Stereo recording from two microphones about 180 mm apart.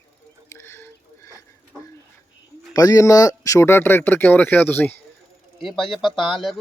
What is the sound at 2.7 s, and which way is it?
Speech, 20° left (ahead or behind).